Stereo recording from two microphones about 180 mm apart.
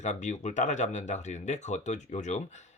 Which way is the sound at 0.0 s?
40° left (ahead or behind).